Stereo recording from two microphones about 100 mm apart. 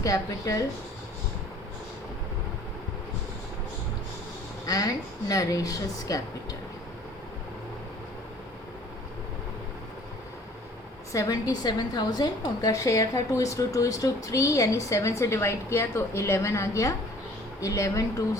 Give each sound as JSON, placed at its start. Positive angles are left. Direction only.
{"t": 0.0, "sound": "a woman's voice", "side_deg": 35}
{"t": 4.6, "sound": "a woman's voice", "side_deg": 35}
{"t": 11.1, "sound": "a woman's voice", "side_deg": 35}